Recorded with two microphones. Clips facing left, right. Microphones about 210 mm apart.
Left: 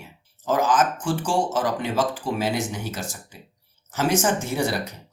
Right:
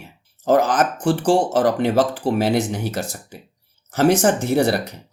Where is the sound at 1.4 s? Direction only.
35° right (ahead or behind).